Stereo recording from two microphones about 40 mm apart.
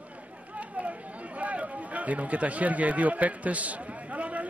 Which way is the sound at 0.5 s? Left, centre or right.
Right.